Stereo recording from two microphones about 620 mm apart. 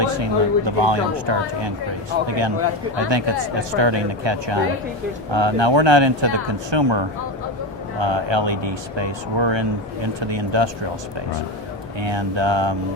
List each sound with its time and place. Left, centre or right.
0.0 s speech: right
11.9 s speech: right